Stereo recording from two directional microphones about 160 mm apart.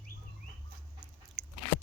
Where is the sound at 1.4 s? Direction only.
5° left (ahead or behind).